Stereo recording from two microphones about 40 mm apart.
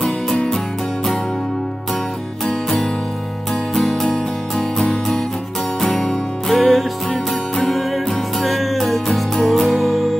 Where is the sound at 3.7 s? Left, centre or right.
Centre.